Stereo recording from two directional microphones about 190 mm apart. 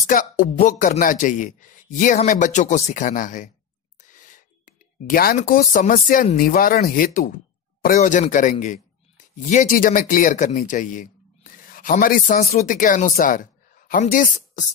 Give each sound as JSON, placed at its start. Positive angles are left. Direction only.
{"t": 0.0, "sound": "a man's voice", "side_deg": 45}
{"t": 4.0, "sound": "a sound", "side_deg": 40}
{"t": 6.3, "sound": "a man's voice", "side_deg": 50}